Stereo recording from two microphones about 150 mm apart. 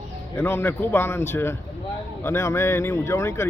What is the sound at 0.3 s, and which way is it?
A man's voice, 15° left (ahead or behind).